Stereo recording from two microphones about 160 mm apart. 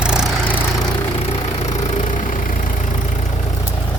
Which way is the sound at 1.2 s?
40° left (ahead or behind).